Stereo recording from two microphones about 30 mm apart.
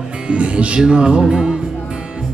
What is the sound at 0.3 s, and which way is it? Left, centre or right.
Speech, right.